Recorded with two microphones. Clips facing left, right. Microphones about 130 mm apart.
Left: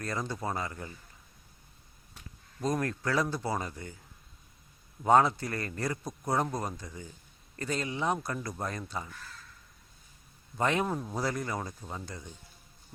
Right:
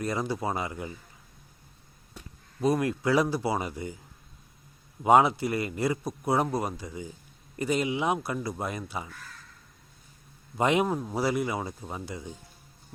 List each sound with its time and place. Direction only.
0.0 s a man's voice: 15° right (ahead or behind)
2.6 s a man's voice: 10° right (ahead or behind)
5.0 s a man's voice: 15° right (ahead or behind)
10.6 s a man's voice: 15° right (ahead or behind)